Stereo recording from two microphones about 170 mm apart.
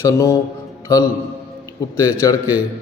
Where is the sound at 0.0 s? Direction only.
20° left (ahead or behind).